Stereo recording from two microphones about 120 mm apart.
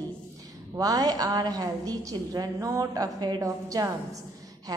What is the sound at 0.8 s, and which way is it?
A woman's voice, 30° right (ahead or behind).